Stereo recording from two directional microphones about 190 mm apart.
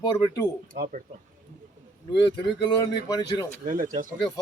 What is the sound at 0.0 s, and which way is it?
Speech, 25° left (ahead or behind).